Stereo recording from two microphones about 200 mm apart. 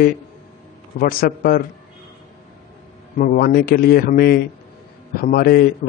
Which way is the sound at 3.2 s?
45° left (ahead or behind).